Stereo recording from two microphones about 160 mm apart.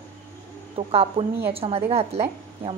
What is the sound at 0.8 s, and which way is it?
A woman's voice, 35° right (ahead or behind).